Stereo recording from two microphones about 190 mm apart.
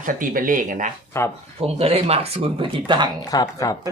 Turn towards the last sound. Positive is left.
turn(degrees=20)  # may be behind; listen again after turning